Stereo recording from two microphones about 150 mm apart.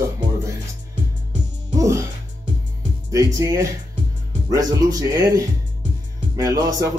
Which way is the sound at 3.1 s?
20° right (ahead or behind).